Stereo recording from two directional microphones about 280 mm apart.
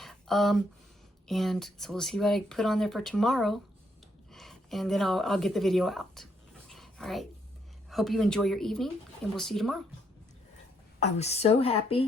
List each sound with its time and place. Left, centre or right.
0.0 s a sound: centre
1.3 s speech: centre
6.7 s dog: centre
7.9 s speech: centre
11.0 s a woman's voice: left